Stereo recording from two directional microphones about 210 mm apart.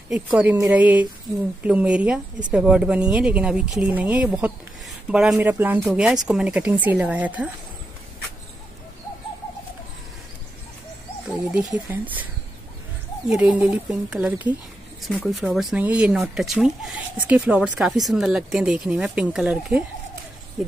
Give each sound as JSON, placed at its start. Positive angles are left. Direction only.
{"t": 0.1, "sound": "speech", "side_deg": -5}
{"t": 11.5, "sound": "speech", "side_deg": -5}
{"t": 13.3, "sound": "speech", "side_deg": -5}